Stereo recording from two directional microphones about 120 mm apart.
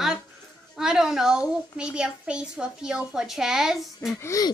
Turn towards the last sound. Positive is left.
turn(degrees=30)  # may be behind; listen again after turning